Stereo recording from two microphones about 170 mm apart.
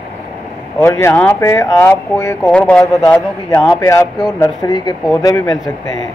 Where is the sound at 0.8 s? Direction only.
15° left (ahead or behind).